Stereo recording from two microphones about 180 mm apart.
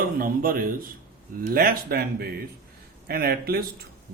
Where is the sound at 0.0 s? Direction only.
50° right (ahead or behind).